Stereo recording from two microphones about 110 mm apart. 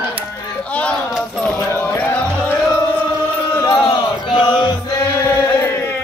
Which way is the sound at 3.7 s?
45° left (ahead or behind).